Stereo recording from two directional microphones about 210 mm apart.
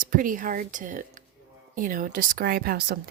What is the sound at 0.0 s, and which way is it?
A woman's voice, 40° right (ahead or behind).